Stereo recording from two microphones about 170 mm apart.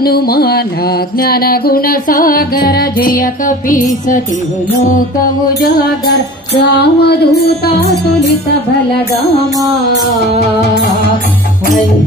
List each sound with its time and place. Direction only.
0.0 s music: 65° left (ahead or behind)
5.6 s music: 70° left (ahead or behind)